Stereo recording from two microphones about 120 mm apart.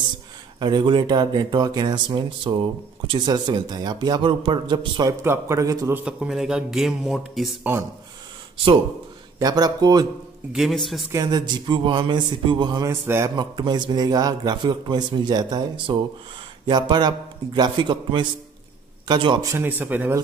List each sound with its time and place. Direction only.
0.6 s a man's voice: 35° right (ahead or behind)
5.2 s a man's voice: 20° right (ahead or behind)
5.9 s a man's voice: 10° right (ahead or behind)
9.4 s a man's voice: 35° right (ahead or behind)
10.5 s a man's voice: centre (ahead or behind)
11.1 s a man's voice: 30° right (ahead or behind)
12.8 s a man's voice: 25° right (ahead or behind)
13.4 s a man's voice: 40° right (ahead or behind)
19.4 s a man's voice: 25° right (ahead or behind)